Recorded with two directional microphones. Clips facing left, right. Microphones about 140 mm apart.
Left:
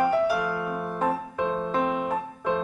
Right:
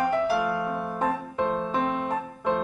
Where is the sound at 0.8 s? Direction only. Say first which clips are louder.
Left 1 dB; centre (ahead or behind).